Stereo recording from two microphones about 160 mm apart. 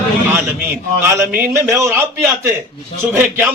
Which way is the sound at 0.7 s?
15° right (ahead or behind).